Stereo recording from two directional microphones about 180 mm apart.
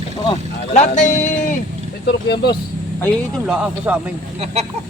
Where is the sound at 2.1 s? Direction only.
65° left (ahead or behind).